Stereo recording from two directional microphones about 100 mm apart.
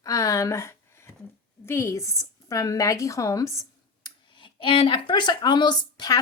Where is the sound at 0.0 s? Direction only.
35° left (ahead or behind).